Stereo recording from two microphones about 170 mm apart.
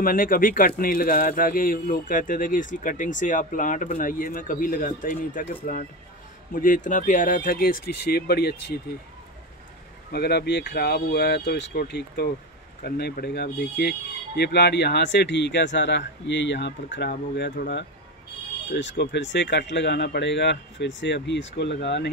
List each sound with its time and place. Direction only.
0.0 s speech: 55° left (ahead or behind)
10.1 s speech: 70° left (ahead or behind)